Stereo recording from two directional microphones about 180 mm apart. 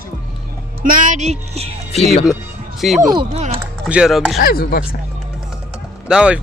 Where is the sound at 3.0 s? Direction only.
20° right (ahead or behind).